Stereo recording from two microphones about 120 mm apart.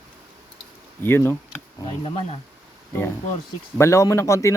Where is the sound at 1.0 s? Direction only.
20° left (ahead or behind).